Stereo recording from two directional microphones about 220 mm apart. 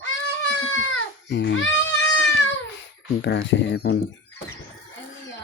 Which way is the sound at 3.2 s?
55° left (ahead or behind).